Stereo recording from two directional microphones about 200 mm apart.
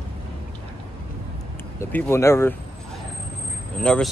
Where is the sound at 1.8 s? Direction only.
10° left (ahead or behind).